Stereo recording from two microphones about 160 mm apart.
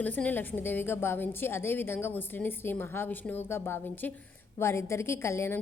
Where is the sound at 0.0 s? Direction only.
10° left (ahead or behind).